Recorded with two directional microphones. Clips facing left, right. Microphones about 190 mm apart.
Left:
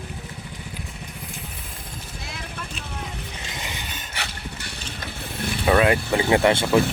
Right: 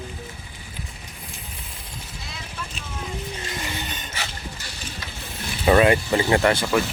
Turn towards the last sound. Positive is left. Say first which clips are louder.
# left 1 dB
turn(degrees=20)  # may be behind; listen again after turning